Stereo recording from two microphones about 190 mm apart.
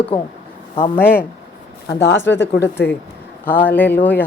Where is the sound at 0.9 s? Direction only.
10° left (ahead or behind).